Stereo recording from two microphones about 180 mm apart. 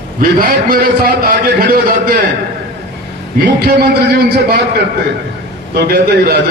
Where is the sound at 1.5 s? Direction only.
55° right (ahead or behind).